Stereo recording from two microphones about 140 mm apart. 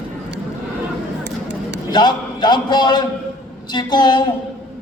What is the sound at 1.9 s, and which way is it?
A man's voice, 30° left (ahead or behind).